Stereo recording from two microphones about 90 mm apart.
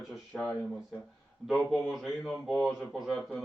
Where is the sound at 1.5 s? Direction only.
Centre (ahead or behind).